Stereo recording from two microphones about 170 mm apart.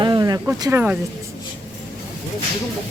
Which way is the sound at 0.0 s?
25° right (ahead or behind).